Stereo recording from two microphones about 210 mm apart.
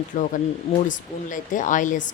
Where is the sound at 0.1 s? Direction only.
40° left (ahead or behind).